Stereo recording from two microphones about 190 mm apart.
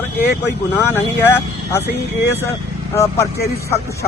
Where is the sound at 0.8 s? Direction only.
10° left (ahead or behind).